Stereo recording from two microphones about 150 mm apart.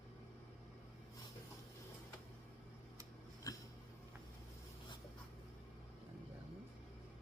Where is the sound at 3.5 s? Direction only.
25° left (ahead or behind).